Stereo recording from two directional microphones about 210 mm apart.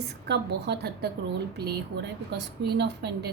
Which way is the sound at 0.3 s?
50° right (ahead or behind).